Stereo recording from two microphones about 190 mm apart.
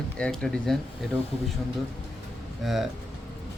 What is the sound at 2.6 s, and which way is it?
Speech, centre (ahead or behind).